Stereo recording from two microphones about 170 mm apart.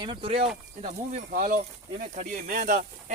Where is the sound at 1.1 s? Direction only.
55° right (ahead or behind).